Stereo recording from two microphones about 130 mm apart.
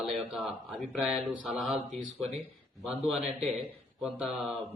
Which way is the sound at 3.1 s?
Centre (ahead or behind).